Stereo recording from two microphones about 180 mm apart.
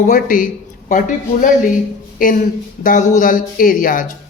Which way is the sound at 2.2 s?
50° left (ahead or behind).